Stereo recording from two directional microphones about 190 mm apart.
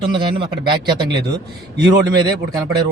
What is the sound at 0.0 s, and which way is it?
A man's voice, 25° right (ahead or behind).